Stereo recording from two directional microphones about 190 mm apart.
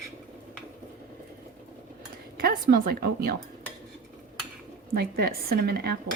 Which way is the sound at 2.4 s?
50° right (ahead or behind).